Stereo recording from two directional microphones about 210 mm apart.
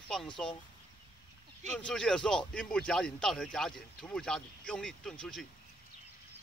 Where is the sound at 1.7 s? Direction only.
5° left (ahead or behind).